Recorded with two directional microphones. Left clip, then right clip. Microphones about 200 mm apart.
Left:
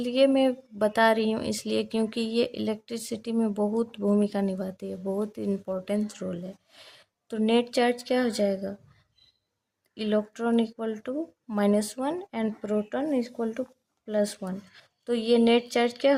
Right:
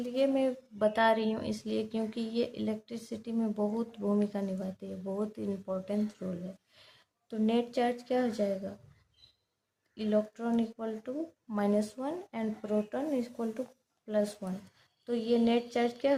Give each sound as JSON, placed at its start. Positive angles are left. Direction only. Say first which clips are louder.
{"t": 0.0, "sound": "a woman's voice", "louder": "left 7 dB", "side_deg": 40}
{"t": 9.9, "sound": "a woman's voice", "louder": "left 3 dB", "side_deg": 40}